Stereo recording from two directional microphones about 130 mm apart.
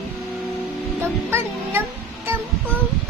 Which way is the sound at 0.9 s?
20° right (ahead or behind).